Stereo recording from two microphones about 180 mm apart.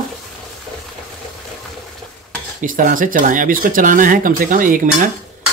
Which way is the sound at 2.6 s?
50° right (ahead or behind).